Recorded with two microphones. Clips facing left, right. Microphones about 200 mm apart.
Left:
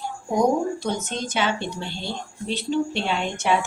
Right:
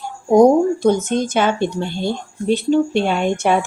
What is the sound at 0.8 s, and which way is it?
Speech, 50° right (ahead or behind).